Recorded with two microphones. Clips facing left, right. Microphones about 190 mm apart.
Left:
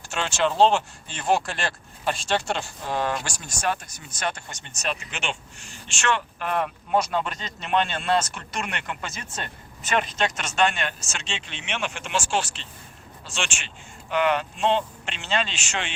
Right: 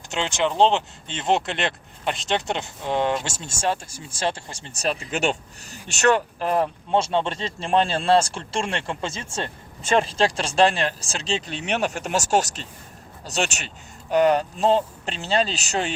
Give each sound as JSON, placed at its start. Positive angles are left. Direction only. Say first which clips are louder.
{"t": 0.1, "sound": "speech", "louder": "right 1 dB", "side_deg": -20}